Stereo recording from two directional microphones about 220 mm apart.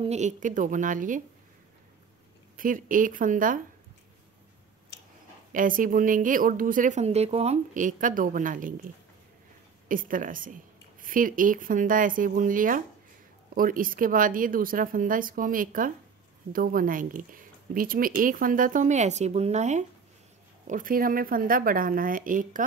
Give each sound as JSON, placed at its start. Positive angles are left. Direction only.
{"t": 0.0, "sound": "speech", "side_deg": -30}
{"t": 2.5, "sound": "speech", "side_deg": -40}
{"t": 5.5, "sound": "speech", "side_deg": -40}
{"t": 9.8, "sound": "speech", "side_deg": -40}